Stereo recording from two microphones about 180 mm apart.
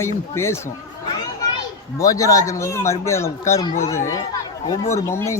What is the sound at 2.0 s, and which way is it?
Speech, 20° left (ahead or behind).